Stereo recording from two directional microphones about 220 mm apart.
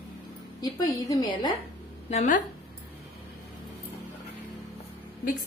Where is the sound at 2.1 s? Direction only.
35° left (ahead or behind).